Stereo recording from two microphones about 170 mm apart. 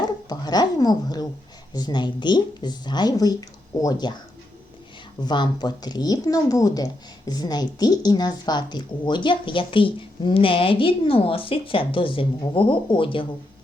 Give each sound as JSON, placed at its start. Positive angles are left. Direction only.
{"t": 0.0, "sound": "speech", "side_deg": 25}
{"t": 5.2, "sound": "a woman's voice", "side_deg": 25}